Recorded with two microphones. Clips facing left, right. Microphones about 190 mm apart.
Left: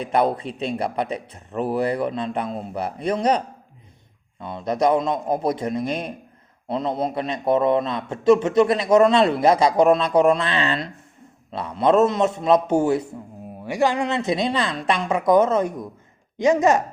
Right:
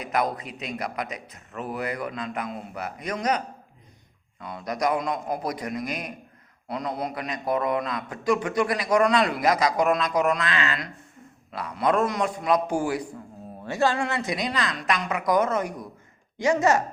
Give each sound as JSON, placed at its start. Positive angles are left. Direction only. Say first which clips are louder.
{"t": 0.0, "sound": "a man's voice", "louder": "left 6 dB", "side_deg": 30}